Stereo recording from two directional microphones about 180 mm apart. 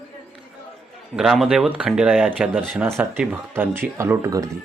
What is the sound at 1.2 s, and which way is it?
Speech, centre (ahead or behind).